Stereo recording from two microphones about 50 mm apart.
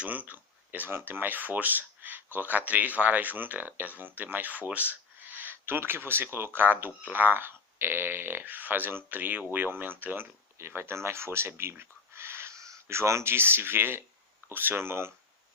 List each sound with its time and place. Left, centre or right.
0.0 s speech: right
12.5 s a sound: right
13.3 s speech: right